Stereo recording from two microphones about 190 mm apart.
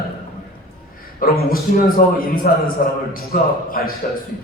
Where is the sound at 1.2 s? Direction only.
50° left (ahead or behind).